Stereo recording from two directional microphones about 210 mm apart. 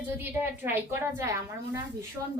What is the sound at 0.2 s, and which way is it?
A woman's voice, 10° right (ahead or behind).